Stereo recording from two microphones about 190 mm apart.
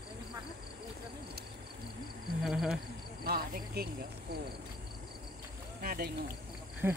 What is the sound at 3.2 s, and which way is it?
Cricket, 55° right (ahead or behind).